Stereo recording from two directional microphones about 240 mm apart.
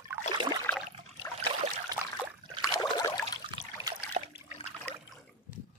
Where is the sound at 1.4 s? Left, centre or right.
Right.